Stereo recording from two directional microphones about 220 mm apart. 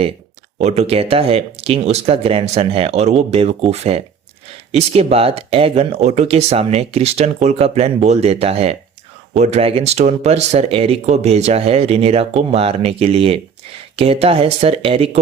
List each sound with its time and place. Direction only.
0.6 s speech: 30° right (ahead or behind)